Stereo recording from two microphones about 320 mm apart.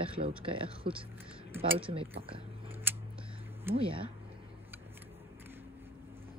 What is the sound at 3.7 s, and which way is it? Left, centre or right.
Speech, centre.